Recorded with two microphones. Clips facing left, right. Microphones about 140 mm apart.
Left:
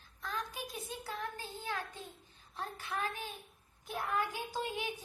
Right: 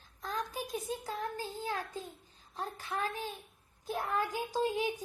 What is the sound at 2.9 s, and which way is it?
Child singing, 35° right (ahead or behind).